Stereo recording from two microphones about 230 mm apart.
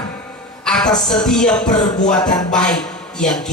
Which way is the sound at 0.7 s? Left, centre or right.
Centre.